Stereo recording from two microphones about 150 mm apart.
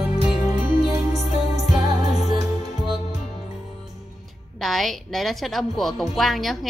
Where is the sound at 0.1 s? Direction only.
25° right (ahead or behind).